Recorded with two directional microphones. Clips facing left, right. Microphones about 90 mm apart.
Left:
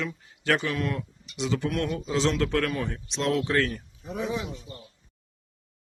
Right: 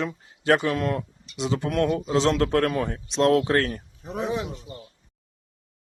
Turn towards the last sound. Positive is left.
turn(degrees=-50)  # may be behind; listen again after turning